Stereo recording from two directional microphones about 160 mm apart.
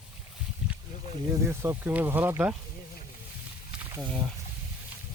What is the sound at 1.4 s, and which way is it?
Speech, 15° right (ahead or behind).